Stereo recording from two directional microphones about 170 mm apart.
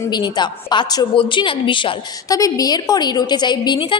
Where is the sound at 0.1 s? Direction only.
25° left (ahead or behind).